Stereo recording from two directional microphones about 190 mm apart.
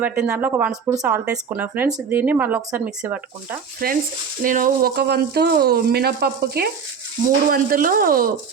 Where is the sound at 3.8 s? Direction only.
50° right (ahead or behind).